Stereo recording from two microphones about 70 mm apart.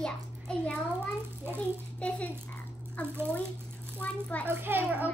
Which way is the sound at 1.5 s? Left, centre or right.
Centre.